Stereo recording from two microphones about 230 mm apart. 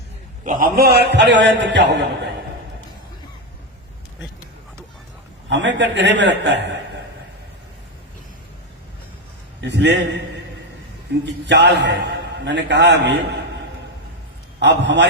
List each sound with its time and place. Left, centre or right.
0.6 s a man's voice: right
5.5 s a man's voice: right
9.6 s a man's voice: right
11.3 s a man's voice: right
14.6 s a man's voice: right